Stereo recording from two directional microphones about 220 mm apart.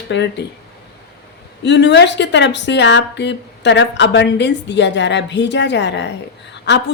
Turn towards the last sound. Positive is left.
turn(degrees=50)  # may be behind; listen again after turning